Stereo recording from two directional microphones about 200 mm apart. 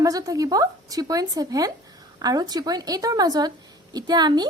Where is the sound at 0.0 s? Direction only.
15° right (ahead or behind).